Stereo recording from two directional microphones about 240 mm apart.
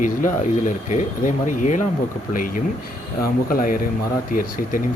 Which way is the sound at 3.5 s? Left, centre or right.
Left.